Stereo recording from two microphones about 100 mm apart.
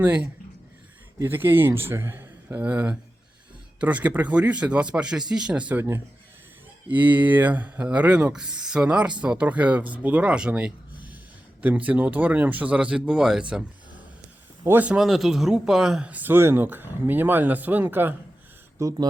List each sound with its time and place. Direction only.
0.0 s a man's voice: 15° right (ahead or behind)
14.6 s speech: 20° right (ahead or behind)
14.9 s speech: centre (ahead or behind); by 18.1 s 20° right (ahead or behind)
18.8 s speech: 35° right (ahead or behind)